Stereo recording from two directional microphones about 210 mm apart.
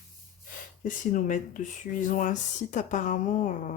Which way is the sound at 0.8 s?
40° left (ahead or behind).